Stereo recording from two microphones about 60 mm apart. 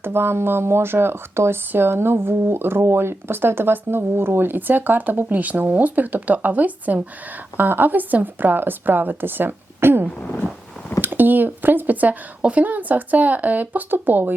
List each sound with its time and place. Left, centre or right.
0.0 s speech: right